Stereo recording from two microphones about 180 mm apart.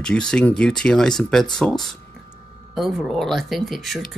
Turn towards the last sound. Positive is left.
turn(degrees=0)  # may be behind; listen again after turning